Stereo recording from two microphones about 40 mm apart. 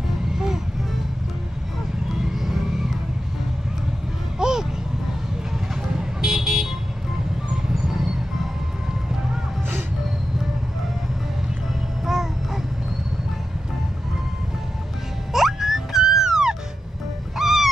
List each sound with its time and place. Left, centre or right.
0.3 s music: centre
2.0 s vehicle: centre
4.4 s a sound: centre
5.8 s vehicle: centre
7.7 s music: centre
12.0 s babbling: centre
15.3 s music: centre
17.4 s a sound: centre